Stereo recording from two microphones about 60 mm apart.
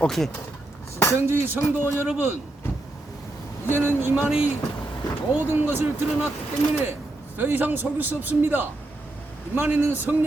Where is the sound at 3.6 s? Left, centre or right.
Right.